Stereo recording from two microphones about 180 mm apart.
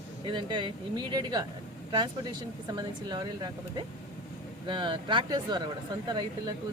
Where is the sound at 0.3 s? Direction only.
25° right (ahead or behind).